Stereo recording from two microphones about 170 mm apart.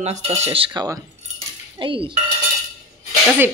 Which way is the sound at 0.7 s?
20° right (ahead or behind).